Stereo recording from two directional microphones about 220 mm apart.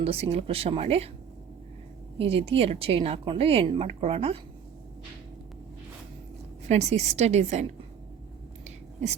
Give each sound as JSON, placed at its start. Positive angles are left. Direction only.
{"t": 0.0, "sound": "speech", "side_deg": -25}
{"t": 2.1, "sound": "speech", "side_deg": -25}
{"t": 6.7, "sound": "a woman's voice", "side_deg": -30}
{"t": 8.6, "sound": "a sound", "side_deg": -30}